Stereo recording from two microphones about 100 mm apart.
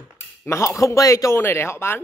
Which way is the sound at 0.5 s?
30° left (ahead or behind).